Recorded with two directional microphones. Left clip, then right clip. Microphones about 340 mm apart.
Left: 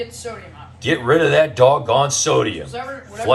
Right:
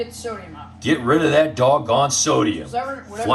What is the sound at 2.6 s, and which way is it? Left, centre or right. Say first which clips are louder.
Speech: right 3 dB; centre.